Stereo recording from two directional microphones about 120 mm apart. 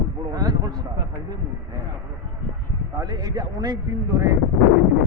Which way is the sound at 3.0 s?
35° right (ahead or behind).